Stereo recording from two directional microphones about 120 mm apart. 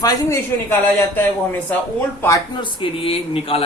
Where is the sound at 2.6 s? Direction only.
50° left (ahead or behind).